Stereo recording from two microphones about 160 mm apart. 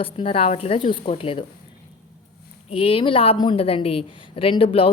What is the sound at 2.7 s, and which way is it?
A woman's voice, 35° left (ahead or behind).